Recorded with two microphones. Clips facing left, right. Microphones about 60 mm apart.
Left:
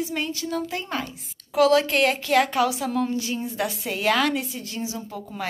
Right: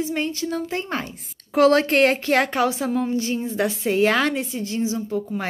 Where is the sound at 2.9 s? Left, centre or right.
Centre.